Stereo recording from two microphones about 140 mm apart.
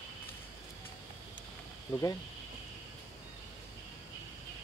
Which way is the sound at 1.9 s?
25° left (ahead or behind).